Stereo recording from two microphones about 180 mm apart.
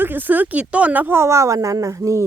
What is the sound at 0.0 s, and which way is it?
Speech, 10° right (ahead or behind).